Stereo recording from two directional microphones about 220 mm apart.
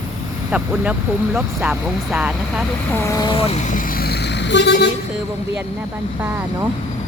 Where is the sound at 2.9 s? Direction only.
15° left (ahead or behind).